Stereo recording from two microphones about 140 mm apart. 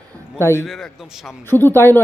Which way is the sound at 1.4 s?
15° left (ahead or behind).